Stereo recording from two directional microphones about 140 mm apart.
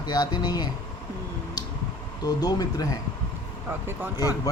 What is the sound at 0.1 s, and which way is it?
Speech, 30° left (ahead or behind).